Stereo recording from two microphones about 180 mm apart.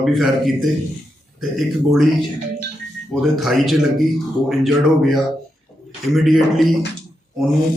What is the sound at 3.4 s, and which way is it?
A man's voice, centre (ahead or behind).